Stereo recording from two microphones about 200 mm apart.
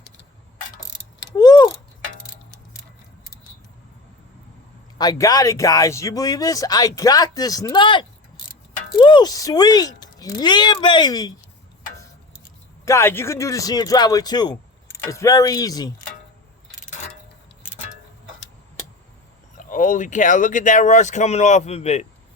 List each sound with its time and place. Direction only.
1.4 s clock: 20° left (ahead or behind)
4.9 s speech: 20° left (ahead or behind)
12.8 s speech: 15° left (ahead or behind)
19.5 s speech: 40° left (ahead or behind)